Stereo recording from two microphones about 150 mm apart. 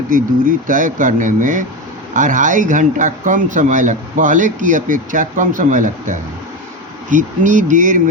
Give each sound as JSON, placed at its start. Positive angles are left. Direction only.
{"t": 0.1, "sound": "speech", "side_deg": -65}